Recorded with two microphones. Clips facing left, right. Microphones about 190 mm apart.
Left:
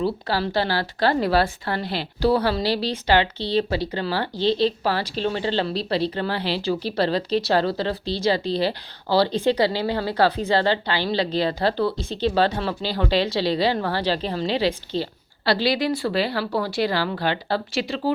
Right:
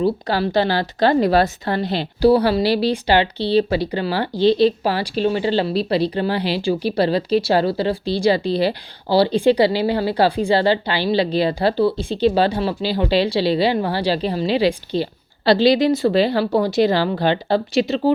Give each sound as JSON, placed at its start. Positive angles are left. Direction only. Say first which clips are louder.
{"t": 0.0, "sound": "a woman's voice", "louder": "right 4 dB", "side_deg": -15}